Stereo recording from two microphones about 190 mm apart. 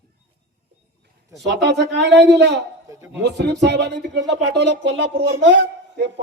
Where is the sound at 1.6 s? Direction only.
65° right (ahead or behind).